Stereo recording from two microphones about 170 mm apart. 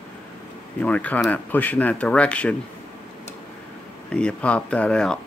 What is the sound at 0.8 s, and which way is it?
Speech, 10° left (ahead or behind).